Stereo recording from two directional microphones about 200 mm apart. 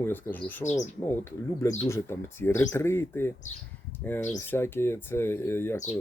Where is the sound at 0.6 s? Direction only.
35° left (ahead or behind).